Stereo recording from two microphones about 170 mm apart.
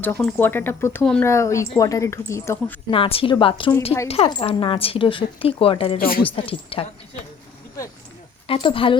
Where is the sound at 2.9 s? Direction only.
35° left (ahead or behind).